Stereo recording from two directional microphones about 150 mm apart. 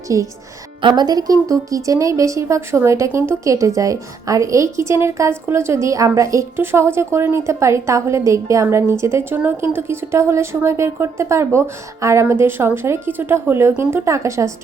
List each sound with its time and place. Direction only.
0.1 s a woman's voice: 20° right (ahead or behind)